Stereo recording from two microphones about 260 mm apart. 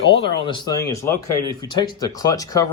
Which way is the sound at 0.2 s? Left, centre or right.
Centre.